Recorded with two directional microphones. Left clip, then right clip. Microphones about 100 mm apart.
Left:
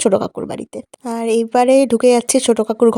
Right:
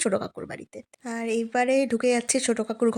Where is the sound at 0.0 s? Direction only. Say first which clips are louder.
Left 11 dB; 50° left (ahead or behind).